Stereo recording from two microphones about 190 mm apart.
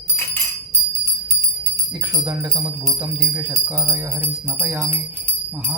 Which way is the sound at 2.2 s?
20° right (ahead or behind).